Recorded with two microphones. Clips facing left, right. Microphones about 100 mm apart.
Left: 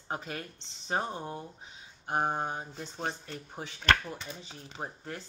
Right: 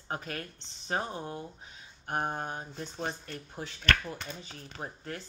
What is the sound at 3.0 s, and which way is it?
Speech, 20° left (ahead or behind).